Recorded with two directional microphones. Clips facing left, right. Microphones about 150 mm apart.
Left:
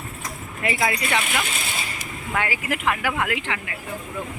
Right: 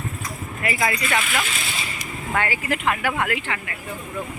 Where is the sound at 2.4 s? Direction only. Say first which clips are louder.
Right 1 dB; 10° left (ahead or behind).